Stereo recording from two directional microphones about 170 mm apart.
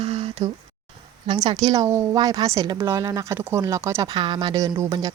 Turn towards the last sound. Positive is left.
turn(degrees=-20)  # may be behind; listen again after turning